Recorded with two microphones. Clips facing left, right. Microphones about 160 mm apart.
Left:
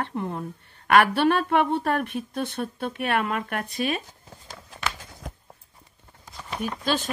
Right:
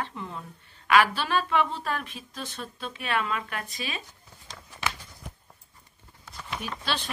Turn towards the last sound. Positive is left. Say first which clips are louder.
# left 6 dB
turn(degrees=45)  # may be behind; listen again after turning